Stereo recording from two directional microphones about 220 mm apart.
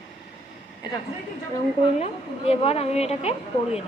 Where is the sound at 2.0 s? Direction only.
30° left (ahead or behind).